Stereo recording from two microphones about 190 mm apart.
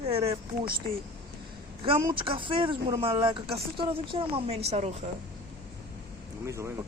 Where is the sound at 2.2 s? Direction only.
25° right (ahead or behind).